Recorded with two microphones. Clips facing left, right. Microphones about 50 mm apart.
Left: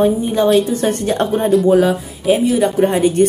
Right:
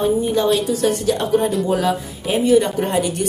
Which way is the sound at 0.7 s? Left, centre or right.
Left.